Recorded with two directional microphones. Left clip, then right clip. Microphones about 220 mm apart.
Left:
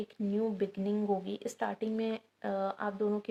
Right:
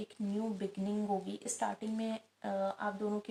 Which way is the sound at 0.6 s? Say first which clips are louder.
Left 5 dB; 50° left (ahead or behind).